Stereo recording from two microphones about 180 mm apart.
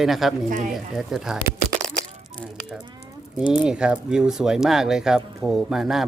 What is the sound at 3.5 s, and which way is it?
Speech, 5° right (ahead or behind).